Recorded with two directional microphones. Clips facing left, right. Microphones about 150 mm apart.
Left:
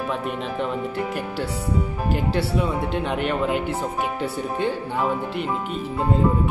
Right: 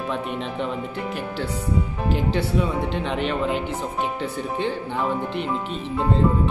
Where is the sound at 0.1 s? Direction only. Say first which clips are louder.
Left 1 dB; centre (ahead or behind).